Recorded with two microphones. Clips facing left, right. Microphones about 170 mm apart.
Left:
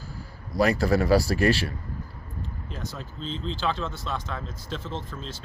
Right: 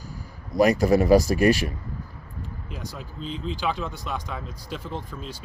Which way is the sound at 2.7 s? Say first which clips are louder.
Even; 10° right (ahead or behind).